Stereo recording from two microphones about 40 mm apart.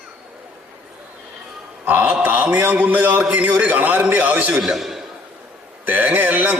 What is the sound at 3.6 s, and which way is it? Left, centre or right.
Speech, right.